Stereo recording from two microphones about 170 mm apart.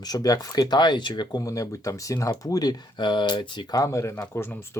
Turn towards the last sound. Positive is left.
turn(degrees=15)  # may be behind; listen again after turning